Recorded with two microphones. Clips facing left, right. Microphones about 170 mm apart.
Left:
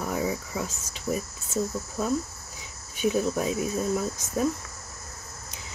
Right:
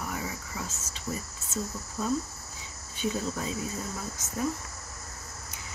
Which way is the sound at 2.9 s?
15° left (ahead or behind).